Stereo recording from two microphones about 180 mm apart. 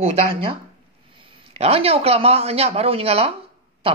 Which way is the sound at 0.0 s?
30° right (ahead or behind).